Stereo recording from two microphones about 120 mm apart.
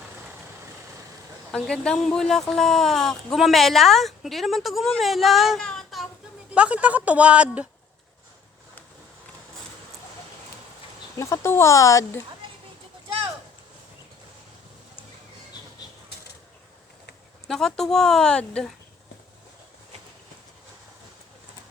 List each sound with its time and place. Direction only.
1.5 s speech: 5° left (ahead or behind)
6.5 s speech: 10° right (ahead or behind)
11.2 s speech: 25° left (ahead or behind)
17.5 s speech: 5° left (ahead or behind)